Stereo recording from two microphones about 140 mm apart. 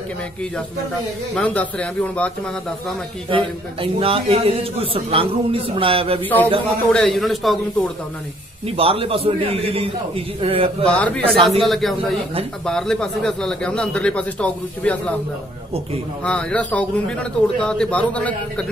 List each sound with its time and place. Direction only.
1.3 s a man's voice: 10° left (ahead or behind)
3.3 s a man's voice: 40° right (ahead or behind)
6.2 s a man's voice: 10° left (ahead or behind)
8.6 s a man's voice: 40° right (ahead or behind)
10.9 s a man's voice: 10° left (ahead or behind)
16.3 s a man's voice: 5° left (ahead or behind)